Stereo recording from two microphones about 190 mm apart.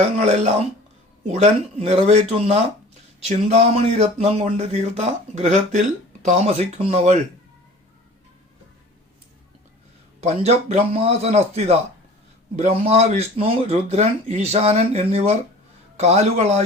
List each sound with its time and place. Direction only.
0.2 s speech: 35° right (ahead or behind)
10.2 s speech: 35° right (ahead or behind)